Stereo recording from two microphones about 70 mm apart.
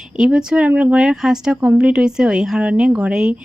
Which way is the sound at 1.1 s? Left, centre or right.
Centre.